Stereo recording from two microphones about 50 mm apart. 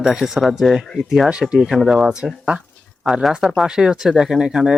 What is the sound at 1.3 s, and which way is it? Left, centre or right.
Speech, centre.